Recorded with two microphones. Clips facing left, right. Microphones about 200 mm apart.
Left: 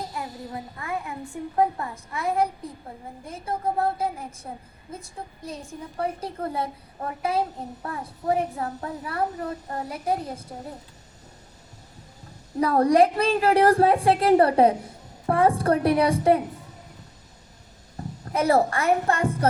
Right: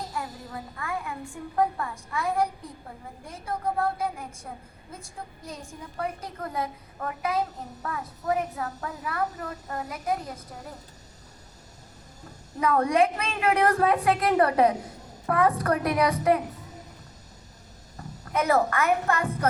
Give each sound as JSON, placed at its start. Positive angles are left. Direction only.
{"t": 0.1, "sound": "a sound", "side_deg": 20}
{"t": 1.5, "sound": "a woman's voice", "side_deg": 20}
{"t": 3.5, "sound": "a woman's voice", "side_deg": 25}
{"t": 6.0, "sound": "a woman's voice", "side_deg": 30}
{"t": 12.5, "sound": "a woman's voice", "side_deg": 35}
{"t": 18.3, "sound": "a woman's voice", "side_deg": 30}